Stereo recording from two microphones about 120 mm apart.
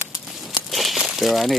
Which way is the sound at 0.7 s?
Centre (ahead or behind).